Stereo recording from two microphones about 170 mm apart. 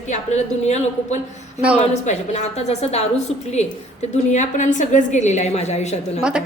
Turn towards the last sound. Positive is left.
turn(degrees=40)  # may be behind; listen again after turning